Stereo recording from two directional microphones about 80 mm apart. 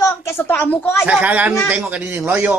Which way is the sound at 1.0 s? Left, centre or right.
Centre.